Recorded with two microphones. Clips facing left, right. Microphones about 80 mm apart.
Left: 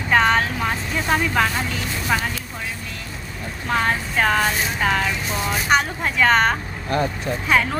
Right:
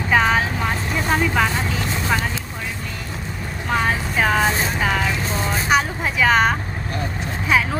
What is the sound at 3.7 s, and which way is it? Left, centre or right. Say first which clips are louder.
A woman's voice: even; centre.